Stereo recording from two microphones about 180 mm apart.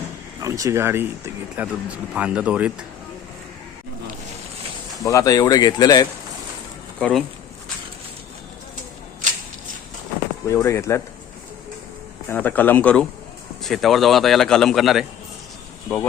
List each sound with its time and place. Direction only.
0.3 s speech: 20° right (ahead or behind)
5.0 s speech: 20° left (ahead or behind)
7.0 s a man's voice: centre (ahead or behind)
10.4 s speech: 15° left (ahead or behind)
12.3 s a man's voice: 10° left (ahead or behind)